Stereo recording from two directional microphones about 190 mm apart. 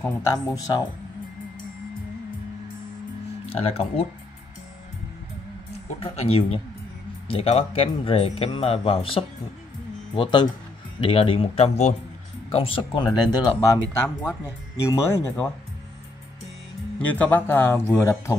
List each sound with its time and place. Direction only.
0.3 s speech: 20° left (ahead or behind)
3.4 s speech: 30° left (ahead or behind)
5.9 s speech: 30° left (ahead or behind); by 15.5 s 10° left (ahead or behind)
17.0 s speech: 10° left (ahead or behind)